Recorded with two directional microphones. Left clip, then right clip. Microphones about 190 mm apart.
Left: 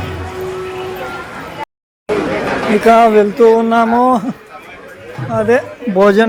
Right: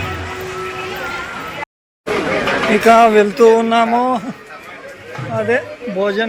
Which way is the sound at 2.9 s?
10° left (ahead or behind).